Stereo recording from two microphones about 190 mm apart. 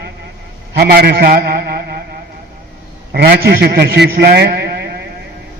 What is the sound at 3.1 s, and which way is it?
A man's voice, 55° right (ahead or behind).